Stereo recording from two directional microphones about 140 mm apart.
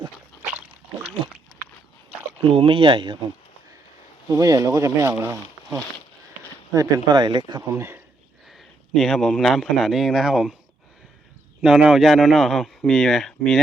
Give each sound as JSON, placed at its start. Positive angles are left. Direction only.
{"t": 2.5, "sound": "speech", "side_deg": -40}
{"t": 4.3, "sound": "speech", "side_deg": -25}
{"t": 6.7, "sound": "speech", "side_deg": -30}
{"t": 7.8, "sound": "speech", "side_deg": -15}
{"t": 8.4, "sound": "a man's voice", "side_deg": 0}
{"t": 11.6, "sound": "speech", "side_deg": -5}